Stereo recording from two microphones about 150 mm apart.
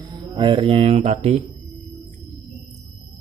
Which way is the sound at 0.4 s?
35° right (ahead or behind).